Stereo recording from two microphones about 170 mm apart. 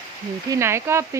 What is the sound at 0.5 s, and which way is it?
Speech, 15° right (ahead or behind).